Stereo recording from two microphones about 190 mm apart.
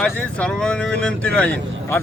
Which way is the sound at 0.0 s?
5° left (ahead or behind).